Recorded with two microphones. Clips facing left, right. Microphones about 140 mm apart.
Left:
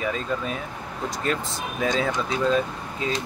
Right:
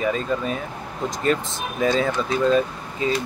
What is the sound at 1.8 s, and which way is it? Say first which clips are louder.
Speech: right 4 dB; centre (ahead or behind).